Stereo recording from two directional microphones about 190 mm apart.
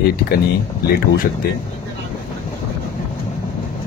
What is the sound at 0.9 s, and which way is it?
Speech, 50° left (ahead or behind).